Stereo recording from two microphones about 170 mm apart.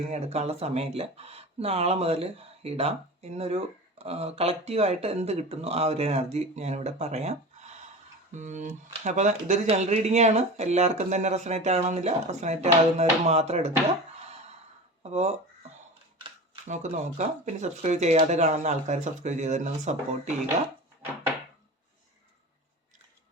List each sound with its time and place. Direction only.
0.1 s speech: 35° right (ahead or behind)
15.1 s speech: 40° right (ahead or behind)
16.6 s speech: 45° right (ahead or behind)